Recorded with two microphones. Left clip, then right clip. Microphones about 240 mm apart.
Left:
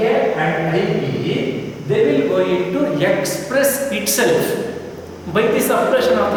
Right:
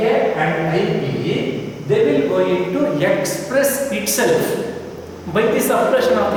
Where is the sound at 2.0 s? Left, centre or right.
Centre.